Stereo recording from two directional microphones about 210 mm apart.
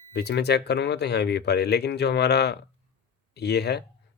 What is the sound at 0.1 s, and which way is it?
Speech, 50° left (ahead or behind).